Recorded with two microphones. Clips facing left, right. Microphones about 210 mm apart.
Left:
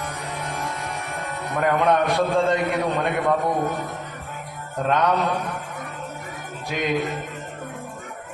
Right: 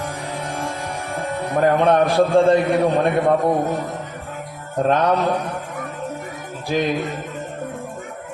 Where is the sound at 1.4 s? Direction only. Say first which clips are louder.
Right 5 dB; 30° right (ahead or behind).